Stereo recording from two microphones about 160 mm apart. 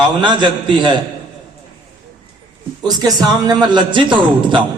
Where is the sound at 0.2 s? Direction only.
30° right (ahead or behind).